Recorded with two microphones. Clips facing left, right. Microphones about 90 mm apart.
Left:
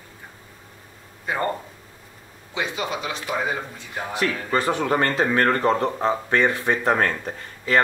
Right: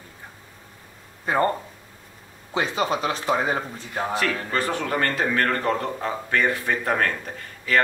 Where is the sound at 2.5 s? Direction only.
40° right (ahead or behind).